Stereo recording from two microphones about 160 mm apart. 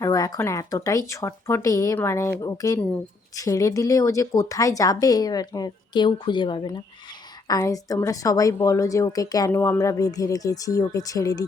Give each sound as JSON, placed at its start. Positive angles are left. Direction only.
{"t": 0.0, "sound": "speech", "side_deg": 20}